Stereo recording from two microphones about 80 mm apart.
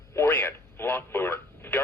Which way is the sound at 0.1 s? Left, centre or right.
Left.